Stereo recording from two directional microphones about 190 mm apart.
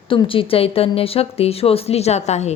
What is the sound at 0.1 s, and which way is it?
A woman's voice, 25° left (ahead or behind).